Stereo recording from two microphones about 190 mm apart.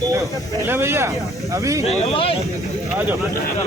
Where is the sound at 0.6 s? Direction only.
10° right (ahead or behind).